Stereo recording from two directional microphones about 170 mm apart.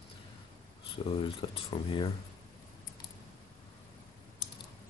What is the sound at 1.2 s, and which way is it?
Speech, 30° left (ahead or behind).